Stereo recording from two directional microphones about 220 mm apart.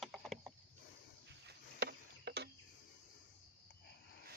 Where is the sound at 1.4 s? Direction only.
50° right (ahead or behind).